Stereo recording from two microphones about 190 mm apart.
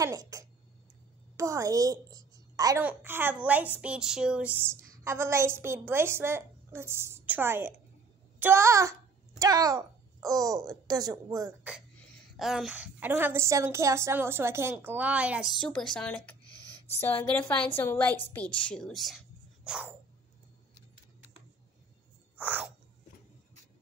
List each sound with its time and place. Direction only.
0.0 s a woman's voice: 15° right (ahead or behind)
12.4 s a woman's voice: centre (ahead or behind)
15.6 s a woman's voice: 5° left (ahead or behind)
22.4 s a woman's voice: 5° right (ahead or behind)